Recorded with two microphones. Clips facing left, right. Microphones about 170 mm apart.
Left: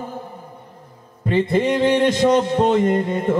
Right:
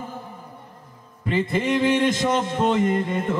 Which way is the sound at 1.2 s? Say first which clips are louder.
Left 5 dB; 40° left (ahead or behind).